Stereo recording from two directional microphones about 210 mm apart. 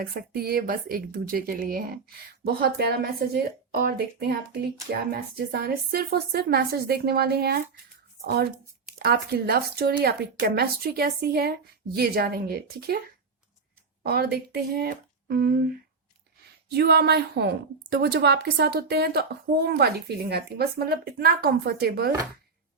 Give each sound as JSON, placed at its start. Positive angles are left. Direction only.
{"t": 0.0, "sound": "a woman's voice", "side_deg": -45}
{"t": 14.0, "sound": "a woman's voice", "side_deg": -50}